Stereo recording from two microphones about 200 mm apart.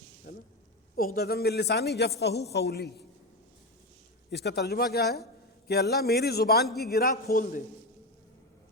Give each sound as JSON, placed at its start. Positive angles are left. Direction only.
{"t": 0.3, "sound": "a sound", "side_deg": 50}
{"t": 0.9, "sound": "a woman's voice", "side_deg": 50}
{"t": 4.3, "sound": "a man's voice", "side_deg": 55}
{"t": 6.7, "sound": "a man's voice", "side_deg": 0}
{"t": 6.9, "sound": "a man's voice", "side_deg": 50}